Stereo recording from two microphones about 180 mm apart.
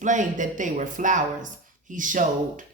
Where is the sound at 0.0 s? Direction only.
45° right (ahead or behind).